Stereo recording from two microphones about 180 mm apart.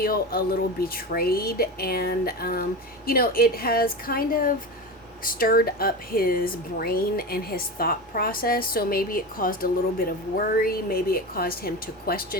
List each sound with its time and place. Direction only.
0.0 s speech: 55° left (ahead or behind)